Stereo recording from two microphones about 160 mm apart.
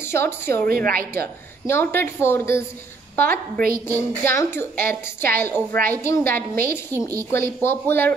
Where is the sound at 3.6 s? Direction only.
65° right (ahead or behind).